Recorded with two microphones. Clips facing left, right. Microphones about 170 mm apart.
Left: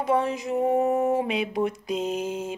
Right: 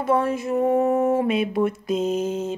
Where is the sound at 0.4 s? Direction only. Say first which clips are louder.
Right 3 dB; 15° left (ahead or behind).